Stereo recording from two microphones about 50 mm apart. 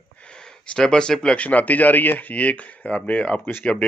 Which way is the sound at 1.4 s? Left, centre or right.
Left.